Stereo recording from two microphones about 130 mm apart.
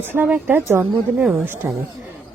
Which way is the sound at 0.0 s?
15° right (ahead or behind).